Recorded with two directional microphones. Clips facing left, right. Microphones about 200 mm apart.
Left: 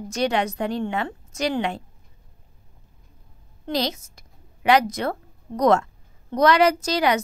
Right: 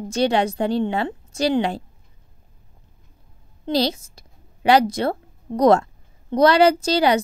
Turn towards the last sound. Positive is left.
turn(degrees=-30)  # may be behind; listen again after turning